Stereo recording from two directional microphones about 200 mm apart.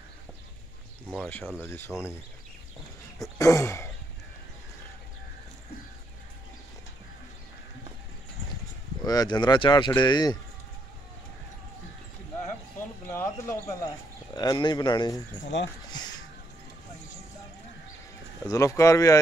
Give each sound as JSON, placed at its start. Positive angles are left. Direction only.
{"t": 1.9, "sound": "speech", "side_deg": 0}
{"t": 3.3, "sound": "speech", "side_deg": 15}
{"t": 9.0, "sound": "speech", "side_deg": 20}
{"t": 12.7, "sound": "speech", "side_deg": 10}
{"t": 15.5, "sound": "speech", "side_deg": 65}
{"t": 15.9, "sound": "a sound", "side_deg": 20}
{"t": 18.4, "sound": "speech", "side_deg": 15}